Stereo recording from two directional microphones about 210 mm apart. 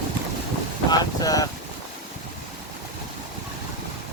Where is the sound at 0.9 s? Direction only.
15° left (ahead or behind).